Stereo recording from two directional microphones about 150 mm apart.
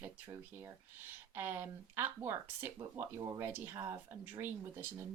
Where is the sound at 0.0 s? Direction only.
15° right (ahead or behind).